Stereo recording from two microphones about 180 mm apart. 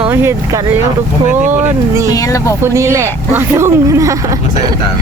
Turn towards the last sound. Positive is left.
turn(degrees=-15)  # may be behind; listen again after turning